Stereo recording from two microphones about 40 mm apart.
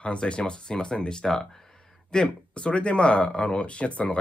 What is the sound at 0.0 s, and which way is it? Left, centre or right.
Speech, left.